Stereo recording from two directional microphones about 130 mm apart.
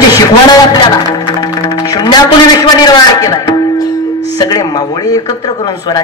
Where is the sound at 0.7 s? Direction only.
35° left (ahead or behind).